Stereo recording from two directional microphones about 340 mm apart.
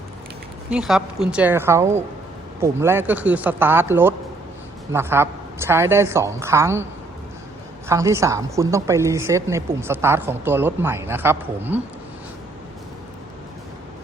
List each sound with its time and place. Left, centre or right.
0.7 s a woman's voice: centre
7.9 s a woman's voice: centre